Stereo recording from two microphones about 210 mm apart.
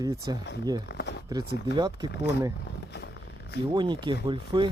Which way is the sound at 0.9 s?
55° left (ahead or behind).